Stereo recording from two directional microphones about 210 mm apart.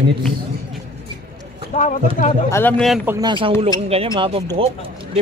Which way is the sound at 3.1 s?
20° right (ahead or behind).